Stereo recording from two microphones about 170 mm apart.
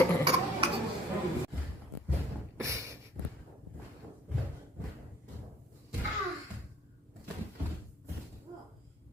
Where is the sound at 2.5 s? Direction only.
15° right (ahead or behind).